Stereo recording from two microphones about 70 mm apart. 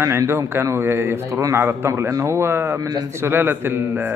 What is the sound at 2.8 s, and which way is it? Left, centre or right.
Speech, right.